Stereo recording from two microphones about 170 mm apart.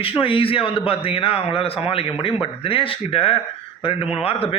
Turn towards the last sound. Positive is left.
turn(degrees=35)  # may be behind; listen again after turning